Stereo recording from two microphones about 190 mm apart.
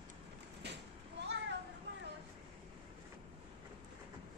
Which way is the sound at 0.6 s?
60° right (ahead or behind).